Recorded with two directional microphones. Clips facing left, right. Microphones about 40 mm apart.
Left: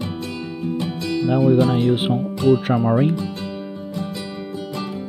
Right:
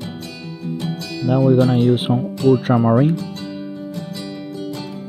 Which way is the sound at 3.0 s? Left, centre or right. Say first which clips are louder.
Right 1 dB; left.